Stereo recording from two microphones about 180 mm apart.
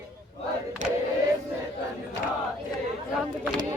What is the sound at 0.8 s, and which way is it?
Car, 45° right (ahead or behind).